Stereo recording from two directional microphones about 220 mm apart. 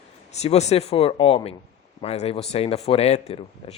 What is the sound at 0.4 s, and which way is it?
Speech, 30° left (ahead or behind).